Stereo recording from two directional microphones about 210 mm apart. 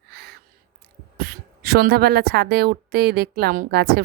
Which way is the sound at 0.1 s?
50° right (ahead or behind).